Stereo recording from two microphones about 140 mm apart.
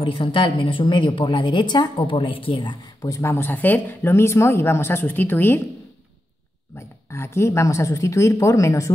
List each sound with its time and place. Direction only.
0.0 s a woman's voice: 40° left (ahead or behind); by 5.6 s 15° left (ahead or behind)
7.1 s speech: 20° left (ahead or behind)